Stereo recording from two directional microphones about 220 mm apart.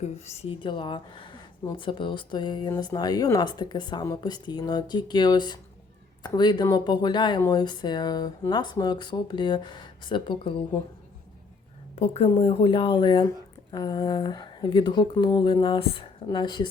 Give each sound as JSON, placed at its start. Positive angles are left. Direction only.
{"t": 0.0, "sound": "speech", "side_deg": 30}
{"t": 11.9, "sound": "speech", "side_deg": 30}